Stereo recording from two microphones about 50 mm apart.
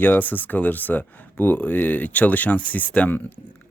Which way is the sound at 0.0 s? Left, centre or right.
Left.